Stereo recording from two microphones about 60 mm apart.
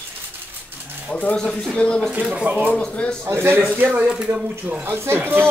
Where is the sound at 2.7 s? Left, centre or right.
Left.